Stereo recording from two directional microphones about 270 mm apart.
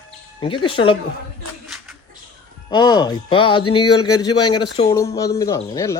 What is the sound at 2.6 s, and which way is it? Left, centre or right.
Speech, centre.